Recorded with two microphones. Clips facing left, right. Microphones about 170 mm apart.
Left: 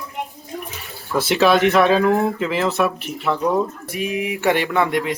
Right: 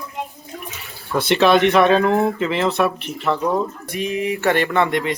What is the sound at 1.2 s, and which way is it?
Speech, 5° left (ahead or behind).